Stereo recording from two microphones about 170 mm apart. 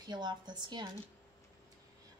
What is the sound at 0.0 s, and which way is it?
Speech, 25° right (ahead or behind).